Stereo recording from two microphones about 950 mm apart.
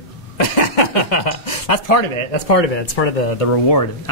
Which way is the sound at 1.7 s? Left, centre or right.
Left.